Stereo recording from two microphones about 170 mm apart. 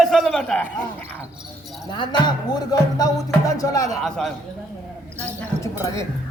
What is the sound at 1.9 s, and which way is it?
Music, 25° left (ahead or behind).